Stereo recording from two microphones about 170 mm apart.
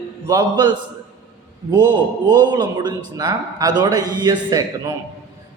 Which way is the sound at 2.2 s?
25° right (ahead or behind).